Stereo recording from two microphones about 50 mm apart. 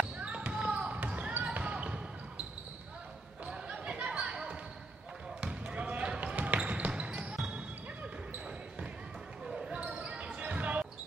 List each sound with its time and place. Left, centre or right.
0.5 s basketball bounce: right
3.4 s basketball bounce: right
9.6 s basketball bounce: right